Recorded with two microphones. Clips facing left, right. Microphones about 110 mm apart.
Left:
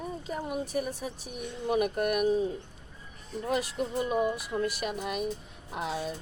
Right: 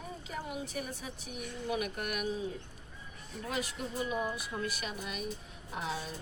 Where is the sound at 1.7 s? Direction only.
50° left (ahead or behind).